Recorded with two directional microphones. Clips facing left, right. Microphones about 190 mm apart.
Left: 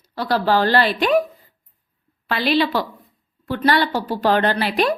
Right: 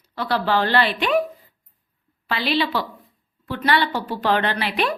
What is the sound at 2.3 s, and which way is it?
A woman's voice, 45° left (ahead or behind).